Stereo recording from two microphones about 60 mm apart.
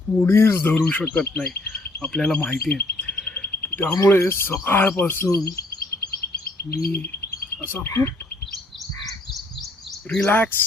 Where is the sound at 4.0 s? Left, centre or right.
Left.